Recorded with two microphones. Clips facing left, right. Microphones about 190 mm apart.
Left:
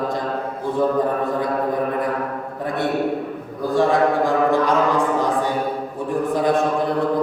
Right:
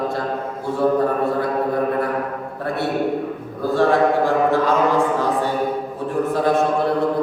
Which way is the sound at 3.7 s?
15° left (ahead or behind).